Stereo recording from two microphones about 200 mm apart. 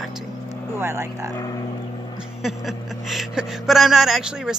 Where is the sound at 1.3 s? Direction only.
20° left (ahead or behind).